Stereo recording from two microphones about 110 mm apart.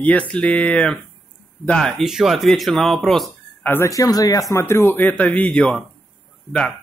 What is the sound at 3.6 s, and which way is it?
Speech, 20° left (ahead or behind).